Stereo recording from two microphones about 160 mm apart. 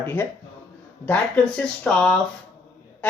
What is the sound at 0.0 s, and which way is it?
Speech, 15° left (ahead or behind).